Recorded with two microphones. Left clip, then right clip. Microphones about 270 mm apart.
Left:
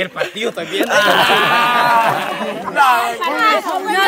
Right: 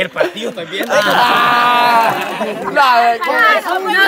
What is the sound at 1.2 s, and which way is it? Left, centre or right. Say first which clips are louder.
Speech: right 2 dB; centre.